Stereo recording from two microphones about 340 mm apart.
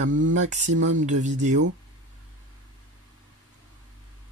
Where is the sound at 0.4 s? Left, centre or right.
Right.